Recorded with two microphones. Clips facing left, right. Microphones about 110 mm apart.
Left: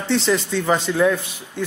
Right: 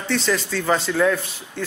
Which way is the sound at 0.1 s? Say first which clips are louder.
Left 3 dB; 20° left (ahead or behind).